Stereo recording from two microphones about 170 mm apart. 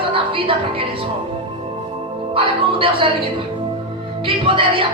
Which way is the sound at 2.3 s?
30° right (ahead or behind).